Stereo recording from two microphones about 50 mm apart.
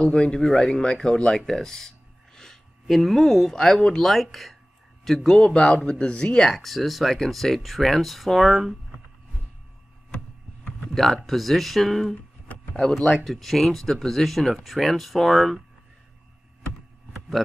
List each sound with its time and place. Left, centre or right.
0.0 s speech: centre
1.4 s a sound: centre
3.5 s speech: centre
11.2 s speech: centre